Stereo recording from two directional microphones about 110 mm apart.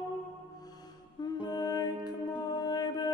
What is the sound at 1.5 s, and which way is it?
Music, 40° left (ahead or behind).